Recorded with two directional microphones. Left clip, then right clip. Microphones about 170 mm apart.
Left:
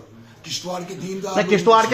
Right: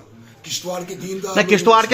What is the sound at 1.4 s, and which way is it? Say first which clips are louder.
Speech: right 2 dB; 45° right (ahead or behind).